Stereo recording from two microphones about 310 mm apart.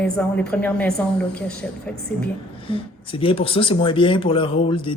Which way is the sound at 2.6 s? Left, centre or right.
Centre.